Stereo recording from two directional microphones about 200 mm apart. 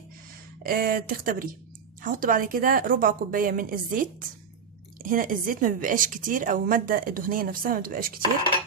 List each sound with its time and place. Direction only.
0.6 s a woman's voice: 45° right (ahead or behind)